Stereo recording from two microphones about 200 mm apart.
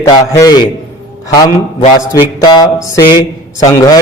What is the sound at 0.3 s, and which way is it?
Speech, 20° left (ahead or behind).